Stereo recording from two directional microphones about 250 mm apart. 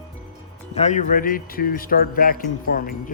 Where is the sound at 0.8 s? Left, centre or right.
Left.